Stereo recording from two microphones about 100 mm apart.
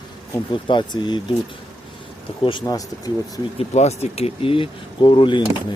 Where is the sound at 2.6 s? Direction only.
35° left (ahead or behind).